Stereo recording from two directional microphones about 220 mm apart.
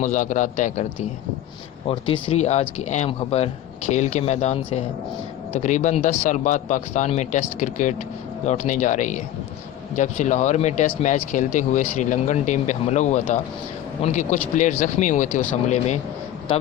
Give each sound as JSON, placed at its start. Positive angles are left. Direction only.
{"t": 0.0, "sound": "speech", "side_deg": 35}
{"t": 1.9, "sound": "speech", "side_deg": 25}